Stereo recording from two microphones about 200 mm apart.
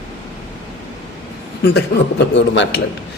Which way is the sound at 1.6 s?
60° left (ahead or behind).